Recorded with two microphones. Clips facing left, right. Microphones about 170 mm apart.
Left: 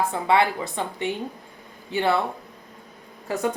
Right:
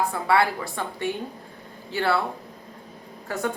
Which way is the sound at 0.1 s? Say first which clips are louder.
Left 1 dB; 20° left (ahead or behind).